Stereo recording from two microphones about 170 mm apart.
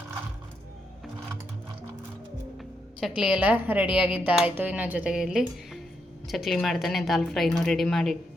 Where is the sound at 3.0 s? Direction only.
5° right (ahead or behind).